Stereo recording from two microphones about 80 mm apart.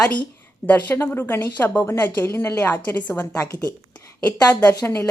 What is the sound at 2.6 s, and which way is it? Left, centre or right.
Speech, left.